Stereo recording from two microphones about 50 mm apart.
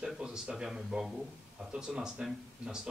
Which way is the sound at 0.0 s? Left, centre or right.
Centre.